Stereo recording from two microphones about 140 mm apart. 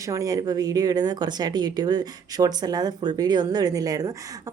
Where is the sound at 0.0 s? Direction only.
25° right (ahead or behind).